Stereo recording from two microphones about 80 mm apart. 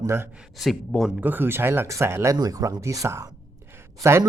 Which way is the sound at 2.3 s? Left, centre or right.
Right.